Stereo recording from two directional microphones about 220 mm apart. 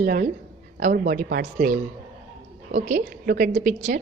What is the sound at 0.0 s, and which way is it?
A woman's voice, 40° right (ahead or behind).